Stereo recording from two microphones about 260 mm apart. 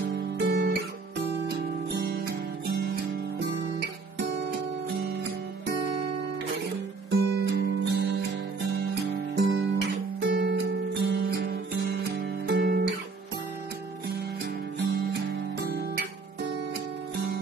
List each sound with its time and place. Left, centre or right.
0.1 s guitar: right
1.9 s music: right
7.1 s music: right
9.5 s music: right
12.4 s guitar: right
15.2 s music: right